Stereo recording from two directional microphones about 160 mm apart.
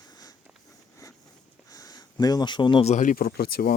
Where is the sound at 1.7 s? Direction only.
25° left (ahead or behind).